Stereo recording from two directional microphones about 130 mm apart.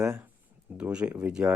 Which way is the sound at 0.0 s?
5° right (ahead or behind).